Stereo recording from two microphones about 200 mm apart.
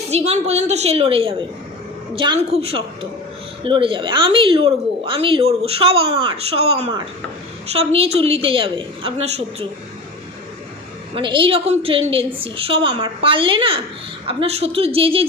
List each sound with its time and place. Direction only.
0.1 s a woman's voice: 30° right (ahead or behind)
11.1 s a woman's voice: 25° right (ahead or behind)